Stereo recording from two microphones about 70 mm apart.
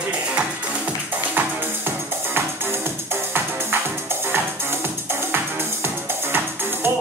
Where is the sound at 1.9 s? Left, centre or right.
Right.